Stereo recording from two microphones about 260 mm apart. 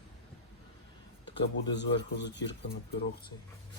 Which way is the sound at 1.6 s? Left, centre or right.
Left.